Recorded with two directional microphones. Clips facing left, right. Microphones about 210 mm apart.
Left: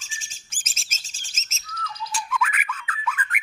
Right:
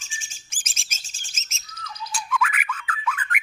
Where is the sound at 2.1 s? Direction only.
Centre (ahead or behind).